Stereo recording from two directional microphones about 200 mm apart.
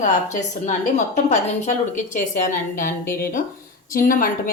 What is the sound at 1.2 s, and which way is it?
A woman's voice, 35° left (ahead or behind).